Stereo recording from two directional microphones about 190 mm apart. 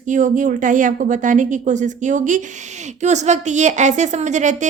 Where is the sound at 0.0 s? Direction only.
40° right (ahead or behind).